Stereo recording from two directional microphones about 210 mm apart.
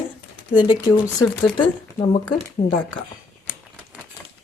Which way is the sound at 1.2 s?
25° left (ahead or behind).